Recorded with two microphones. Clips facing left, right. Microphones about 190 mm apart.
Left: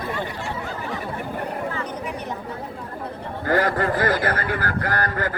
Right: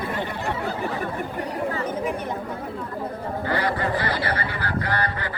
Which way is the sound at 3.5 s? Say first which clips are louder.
Left 5 dB; 45° left (ahead or behind).